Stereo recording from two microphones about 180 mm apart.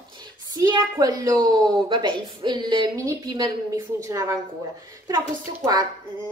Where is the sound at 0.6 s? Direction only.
20° right (ahead or behind).